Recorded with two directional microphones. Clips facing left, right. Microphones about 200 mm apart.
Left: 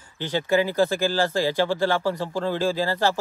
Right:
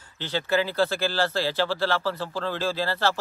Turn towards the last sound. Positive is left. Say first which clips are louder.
# left 3 dB
turn(degrees=15)  # may be behind; listen again after turning